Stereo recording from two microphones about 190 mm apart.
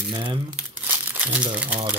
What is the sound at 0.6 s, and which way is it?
Crumpling, 5° right (ahead or behind).